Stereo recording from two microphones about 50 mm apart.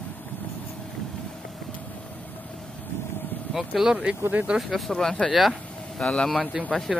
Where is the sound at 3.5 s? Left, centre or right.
Centre.